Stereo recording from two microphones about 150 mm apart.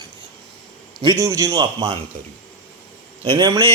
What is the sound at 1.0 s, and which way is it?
Speech, 20° right (ahead or behind).